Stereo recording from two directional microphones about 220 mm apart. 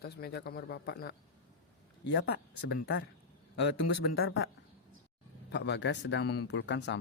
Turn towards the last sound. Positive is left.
turn(degrees=55)  # may be behind; listen again after turning